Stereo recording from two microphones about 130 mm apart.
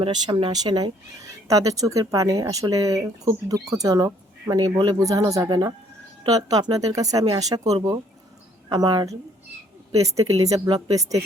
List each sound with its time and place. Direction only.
0.0 s speech: 40° right (ahead or behind)